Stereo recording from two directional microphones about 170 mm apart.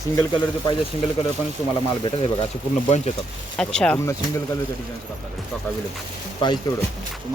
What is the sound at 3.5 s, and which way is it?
Speech, 5° left (ahead or behind).